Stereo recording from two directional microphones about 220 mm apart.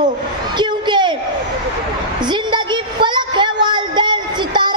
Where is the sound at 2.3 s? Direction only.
20° right (ahead or behind).